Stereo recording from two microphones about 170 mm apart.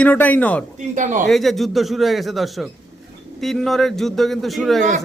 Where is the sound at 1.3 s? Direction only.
Centre (ahead or behind).